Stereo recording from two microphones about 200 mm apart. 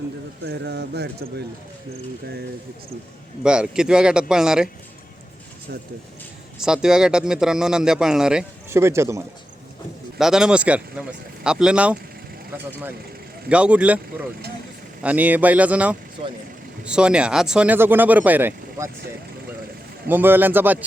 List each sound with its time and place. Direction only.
0.4 s speech: 55° right (ahead or behind)
3.4 s speech: 5° right (ahead or behind)
6.6 s speech: 5° right (ahead or behind)
10.2 s speech: 5° right (ahead or behind)
13.5 s speech: 5° right (ahead or behind)
20.1 s speech: 10° right (ahead or behind)